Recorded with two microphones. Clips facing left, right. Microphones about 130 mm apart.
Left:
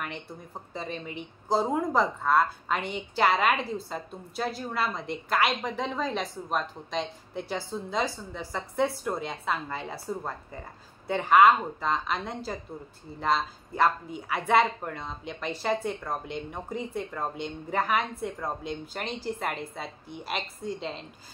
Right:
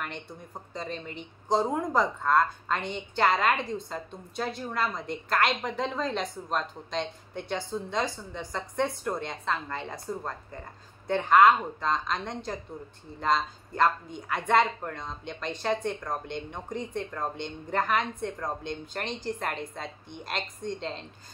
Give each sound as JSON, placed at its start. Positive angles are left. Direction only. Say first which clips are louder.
{"t": 0.0, "sound": "speech", "louder": "left 1 dB", "side_deg": 5}